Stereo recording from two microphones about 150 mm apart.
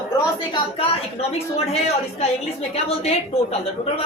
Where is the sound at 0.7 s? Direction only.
40° left (ahead or behind).